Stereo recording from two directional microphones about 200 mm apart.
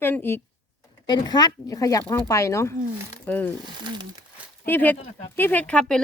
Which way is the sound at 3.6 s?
20° right (ahead or behind).